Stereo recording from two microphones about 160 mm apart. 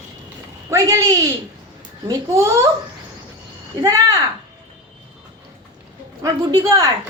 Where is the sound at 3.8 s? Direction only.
20° right (ahead or behind).